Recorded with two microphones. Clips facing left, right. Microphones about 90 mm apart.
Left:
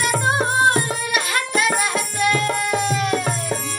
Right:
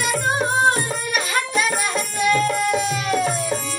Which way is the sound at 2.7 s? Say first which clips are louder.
Left 1 dB; centre (ahead or behind).